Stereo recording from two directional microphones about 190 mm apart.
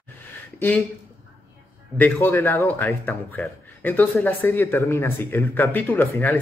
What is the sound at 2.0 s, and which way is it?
Speech, 10° left (ahead or behind).